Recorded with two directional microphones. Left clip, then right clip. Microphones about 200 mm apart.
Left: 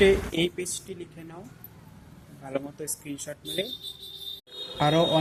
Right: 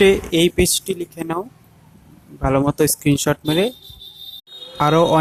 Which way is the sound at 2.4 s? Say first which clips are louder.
Right 17 dB; 35° right (ahead or behind).